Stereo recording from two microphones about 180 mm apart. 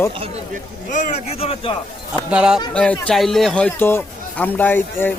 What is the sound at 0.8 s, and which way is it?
Speech, 40° left (ahead or behind).